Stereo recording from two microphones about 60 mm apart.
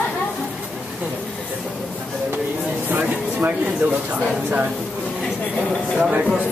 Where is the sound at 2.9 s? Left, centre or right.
Right.